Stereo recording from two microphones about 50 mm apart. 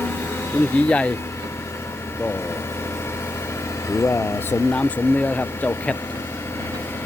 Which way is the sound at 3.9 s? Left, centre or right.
Left.